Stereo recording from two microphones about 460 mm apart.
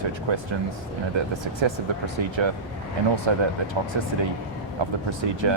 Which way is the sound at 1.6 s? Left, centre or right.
Right.